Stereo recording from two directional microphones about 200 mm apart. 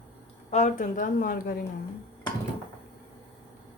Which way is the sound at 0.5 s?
35° left (ahead or behind).